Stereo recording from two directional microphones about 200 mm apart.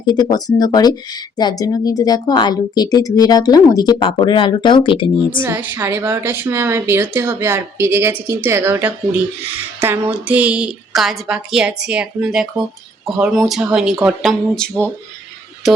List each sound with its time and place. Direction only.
0.0 s speech: 20° left (ahead or behind)
5.4 s a woman's voice: 10° right (ahead or behind)